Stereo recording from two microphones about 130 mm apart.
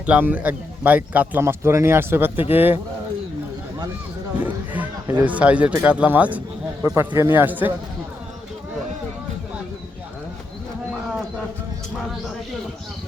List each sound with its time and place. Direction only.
0.0 s speech: 10° right (ahead or behind)
4.4 s a man's voice: 15° right (ahead or behind)